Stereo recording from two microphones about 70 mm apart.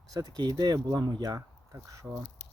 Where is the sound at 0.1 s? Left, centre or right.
Right.